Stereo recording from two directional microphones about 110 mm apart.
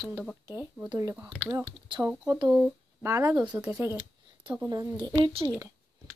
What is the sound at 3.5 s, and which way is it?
Speech, 15° right (ahead or behind).